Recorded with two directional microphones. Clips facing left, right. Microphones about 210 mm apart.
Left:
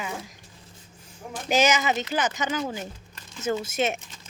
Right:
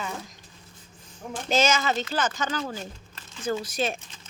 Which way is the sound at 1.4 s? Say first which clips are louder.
Left 1 dB; 15° left (ahead or behind).